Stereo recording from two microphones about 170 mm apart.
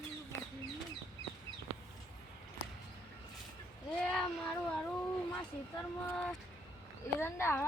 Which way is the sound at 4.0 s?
5° left (ahead or behind).